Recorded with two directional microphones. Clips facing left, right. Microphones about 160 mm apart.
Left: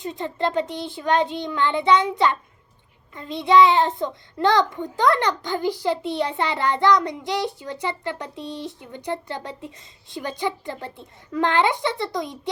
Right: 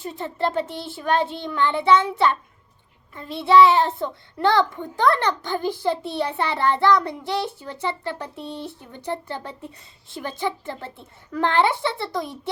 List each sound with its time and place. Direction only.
0.0 s a child's voice: 20° left (ahead or behind)